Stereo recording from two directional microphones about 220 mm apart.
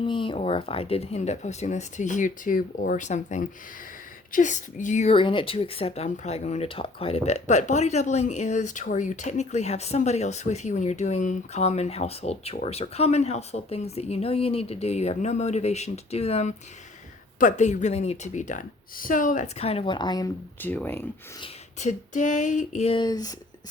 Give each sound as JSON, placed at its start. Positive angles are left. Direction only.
{"t": 0.0, "sound": "speech", "side_deg": 25}
{"t": 21.4, "sound": "speech", "side_deg": 30}